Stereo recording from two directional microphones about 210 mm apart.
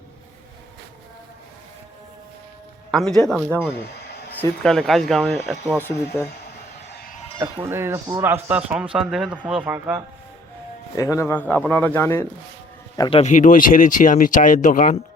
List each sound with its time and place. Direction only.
2.9 s speech: centre (ahead or behind)
4.0 s a sound: 50° left (ahead or behind)
4.4 s speech: 5° left (ahead or behind)
5.8 s speech: 10° left (ahead or behind)
7.3 s speech: 10° right (ahead or behind)
10.9 s speech: 15° left (ahead or behind)
13.0 s speech: 25° left (ahead or behind)